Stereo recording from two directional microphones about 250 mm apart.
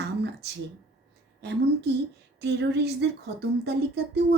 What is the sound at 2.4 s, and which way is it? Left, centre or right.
Speech, right.